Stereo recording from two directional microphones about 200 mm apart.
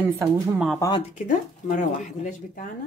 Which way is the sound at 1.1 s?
40° left (ahead or behind).